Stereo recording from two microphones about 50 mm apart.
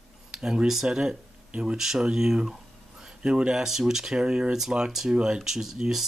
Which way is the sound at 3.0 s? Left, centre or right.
Centre.